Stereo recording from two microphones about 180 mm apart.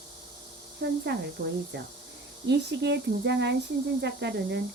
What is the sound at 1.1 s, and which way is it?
Speech, 75° right (ahead or behind).